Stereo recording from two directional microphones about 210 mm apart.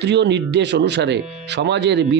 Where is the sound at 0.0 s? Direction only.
55° right (ahead or behind).